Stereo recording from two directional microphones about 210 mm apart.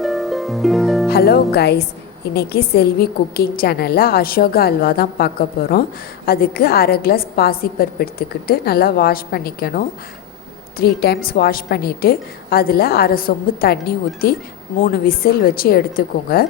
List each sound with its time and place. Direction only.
0.0 s harp: centre (ahead or behind)
1.1 s a woman's voice: 50° left (ahead or behind)